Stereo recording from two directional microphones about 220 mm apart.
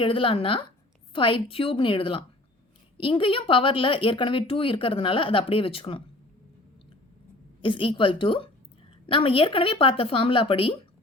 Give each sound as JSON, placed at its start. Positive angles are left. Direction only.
{"t": 0.0, "sound": "speech", "side_deg": 25}
{"t": 7.6, "sound": "speech", "side_deg": 20}